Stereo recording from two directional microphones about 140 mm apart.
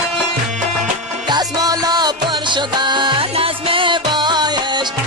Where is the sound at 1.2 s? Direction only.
30° right (ahead or behind).